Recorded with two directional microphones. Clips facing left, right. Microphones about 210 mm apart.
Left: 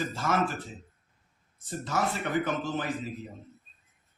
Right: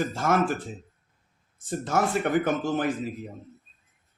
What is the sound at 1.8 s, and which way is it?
A man's voice, 50° right (ahead or behind).